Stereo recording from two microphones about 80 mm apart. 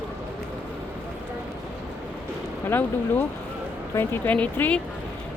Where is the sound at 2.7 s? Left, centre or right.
Left.